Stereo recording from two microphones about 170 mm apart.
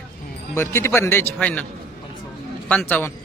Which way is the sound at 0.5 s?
15° left (ahead or behind).